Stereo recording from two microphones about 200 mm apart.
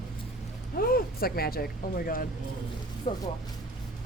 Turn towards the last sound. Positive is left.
turn(degrees=30)  # may be behind; listen again after turning